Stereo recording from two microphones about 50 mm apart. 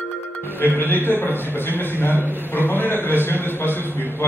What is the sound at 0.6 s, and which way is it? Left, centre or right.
A man's voice, left.